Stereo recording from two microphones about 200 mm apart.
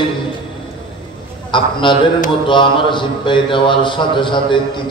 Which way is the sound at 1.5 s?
25° left (ahead or behind).